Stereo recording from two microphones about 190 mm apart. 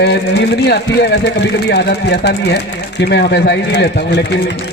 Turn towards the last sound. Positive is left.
turn(degrees=65)  # may be behind; listen again after turning